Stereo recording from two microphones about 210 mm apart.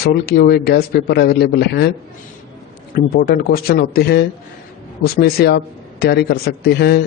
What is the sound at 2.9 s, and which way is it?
A man's voice, 45° left (ahead or behind).